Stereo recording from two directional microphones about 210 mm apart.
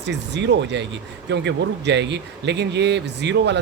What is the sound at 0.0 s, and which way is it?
Speech, 55° right (ahead or behind).